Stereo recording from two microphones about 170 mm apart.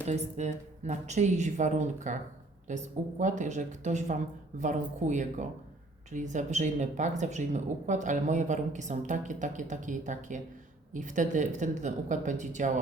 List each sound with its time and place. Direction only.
0.1 s a woman's voice: 45° right (ahead or behind)